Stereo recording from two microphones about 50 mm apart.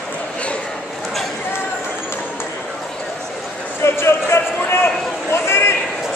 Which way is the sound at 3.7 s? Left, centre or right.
Left.